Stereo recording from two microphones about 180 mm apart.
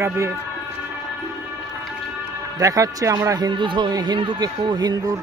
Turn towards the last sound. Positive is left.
turn(degrees=-20)  # may be behind; listen again after turning